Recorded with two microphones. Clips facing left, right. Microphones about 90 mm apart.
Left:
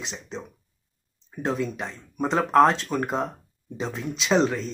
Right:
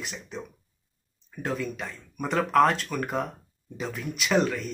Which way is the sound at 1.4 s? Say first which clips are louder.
Left 4 dB; 25° left (ahead or behind).